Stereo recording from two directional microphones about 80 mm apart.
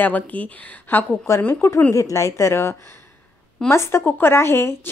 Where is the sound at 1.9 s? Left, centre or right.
Left.